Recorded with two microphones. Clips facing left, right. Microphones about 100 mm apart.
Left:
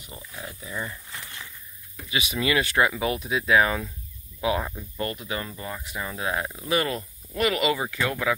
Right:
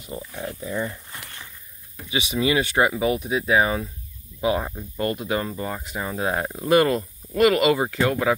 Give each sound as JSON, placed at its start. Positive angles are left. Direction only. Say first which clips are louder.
{"t": 0.4, "sound": "speech", "louder": "right 6 dB", "side_deg": -40}
{"t": 2.0, "sound": "speech", "louder": "right 4 dB", "side_deg": -20}
{"t": 7.0, "sound": "speech", "louder": "right 7 dB", "side_deg": -35}